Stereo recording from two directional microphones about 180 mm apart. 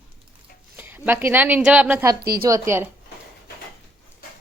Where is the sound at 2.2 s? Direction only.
60° right (ahead or behind).